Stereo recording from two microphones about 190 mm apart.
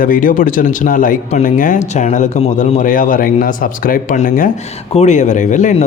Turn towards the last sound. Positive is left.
turn(degrees=40)  # may be behind; listen again after turning